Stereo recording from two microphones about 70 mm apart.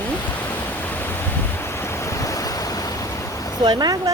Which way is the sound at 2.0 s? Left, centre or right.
Left.